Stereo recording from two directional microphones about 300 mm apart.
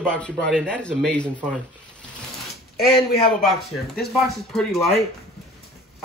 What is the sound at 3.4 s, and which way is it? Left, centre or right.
Speech, centre.